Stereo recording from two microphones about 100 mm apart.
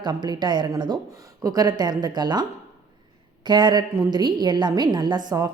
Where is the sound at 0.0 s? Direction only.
45° right (ahead or behind).